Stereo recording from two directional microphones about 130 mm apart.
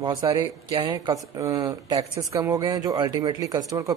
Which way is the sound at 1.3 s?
25° right (ahead or behind).